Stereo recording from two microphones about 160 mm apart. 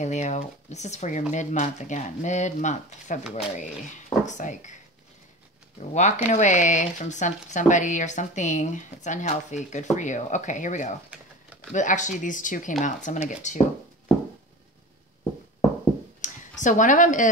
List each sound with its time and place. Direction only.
0.0 s speech: 45° left (ahead or behind)
5.8 s speech: 45° left (ahead or behind)
16.2 s a sound: 50° left (ahead or behind)